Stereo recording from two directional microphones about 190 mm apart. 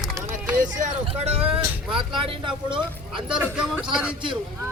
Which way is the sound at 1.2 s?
35° right (ahead or behind).